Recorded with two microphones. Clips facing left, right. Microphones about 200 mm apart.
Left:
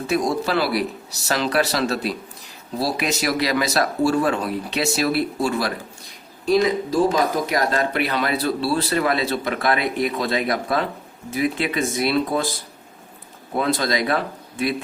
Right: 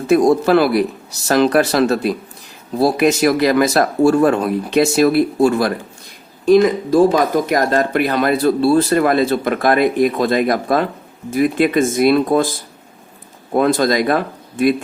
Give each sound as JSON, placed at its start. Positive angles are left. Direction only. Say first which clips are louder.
{"t": 0.1, "sound": "speech", "louder": "right 10 dB", "side_deg": -50}
{"t": 13.5, "sound": "speech", "louder": "right 7 dB", "side_deg": -50}